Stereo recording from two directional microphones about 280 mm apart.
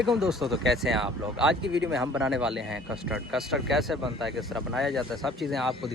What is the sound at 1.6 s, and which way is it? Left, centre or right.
Speech, right.